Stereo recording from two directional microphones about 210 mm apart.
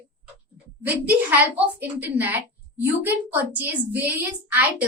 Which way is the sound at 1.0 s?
10° right (ahead or behind).